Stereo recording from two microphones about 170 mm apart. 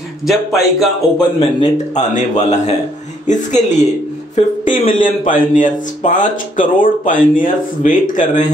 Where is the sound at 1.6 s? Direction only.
45° left (ahead or behind).